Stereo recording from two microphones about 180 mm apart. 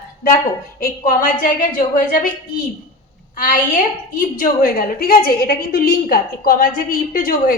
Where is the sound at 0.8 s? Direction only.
50° left (ahead or behind).